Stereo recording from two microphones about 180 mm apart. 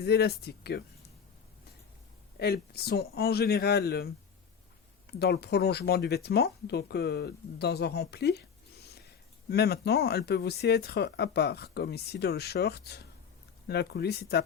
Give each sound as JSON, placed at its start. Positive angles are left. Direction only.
{"t": 0.0, "sound": "speech", "side_deg": 65}
{"t": 2.4, "sound": "speech", "side_deg": 60}
{"t": 5.2, "sound": "speech", "side_deg": 65}
{"t": 9.5, "sound": "speech", "side_deg": 65}